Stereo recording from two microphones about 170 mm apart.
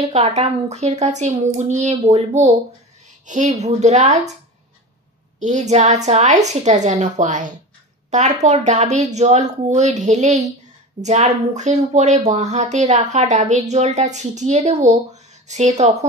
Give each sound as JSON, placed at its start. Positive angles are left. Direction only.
{"t": 0.1, "sound": "a child's voice", "side_deg": -40}
{"t": 5.4, "sound": "speech", "side_deg": -45}